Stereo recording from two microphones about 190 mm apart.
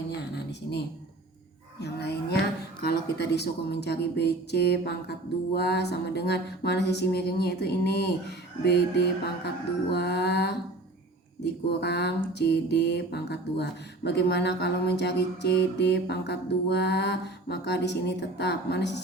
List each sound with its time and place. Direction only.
1.8 s music: 60° left (ahead or behind)
2.8 s mantra: 60° left (ahead or behind)